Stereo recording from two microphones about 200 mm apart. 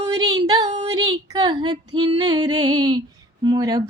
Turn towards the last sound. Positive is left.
turn(degrees=-20)  # may be behind; listen again after turning